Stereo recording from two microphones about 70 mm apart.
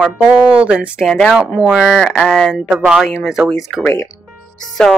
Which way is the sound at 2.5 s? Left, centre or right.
Centre.